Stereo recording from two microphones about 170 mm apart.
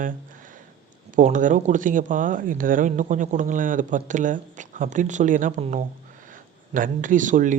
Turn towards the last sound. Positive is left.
turn(degrees=-50)  # may be behind; listen again after turning